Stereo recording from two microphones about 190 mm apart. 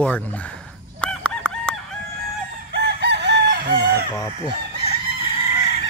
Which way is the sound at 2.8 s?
60° right (ahead or behind).